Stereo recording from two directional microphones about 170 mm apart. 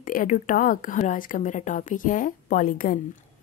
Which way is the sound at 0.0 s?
50° left (ahead or behind).